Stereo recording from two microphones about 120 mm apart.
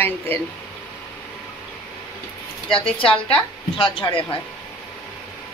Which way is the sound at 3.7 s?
45° left (ahead or behind).